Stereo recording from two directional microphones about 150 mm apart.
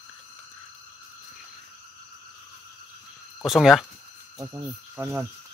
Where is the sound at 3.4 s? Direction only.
5° right (ahead or behind).